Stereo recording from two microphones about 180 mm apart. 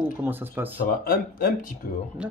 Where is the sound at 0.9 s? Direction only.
55° left (ahead or behind).